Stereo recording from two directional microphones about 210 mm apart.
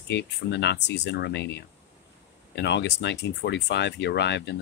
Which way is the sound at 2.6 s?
55° left (ahead or behind).